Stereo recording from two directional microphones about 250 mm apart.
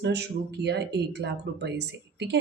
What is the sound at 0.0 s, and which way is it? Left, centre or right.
Speech, right.